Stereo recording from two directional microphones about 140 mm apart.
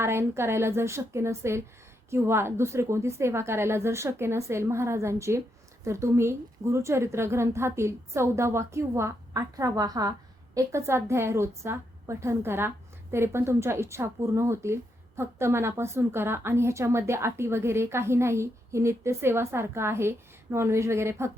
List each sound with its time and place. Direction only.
0.0 s a woman's voice: 20° right (ahead or behind)